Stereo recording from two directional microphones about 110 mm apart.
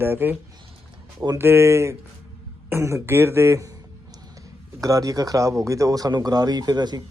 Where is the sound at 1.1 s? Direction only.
30° right (ahead or behind).